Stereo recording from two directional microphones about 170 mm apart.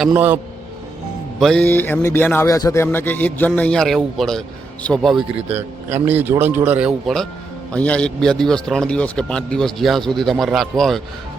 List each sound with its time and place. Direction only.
0.1 s a man's voice: 10° right (ahead or behind)
1.4 s speech: 5° left (ahead or behind)
5.5 s a man's voice: 10° right (ahead or behind)